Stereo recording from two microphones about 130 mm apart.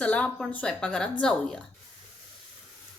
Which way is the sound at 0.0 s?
10° left (ahead or behind).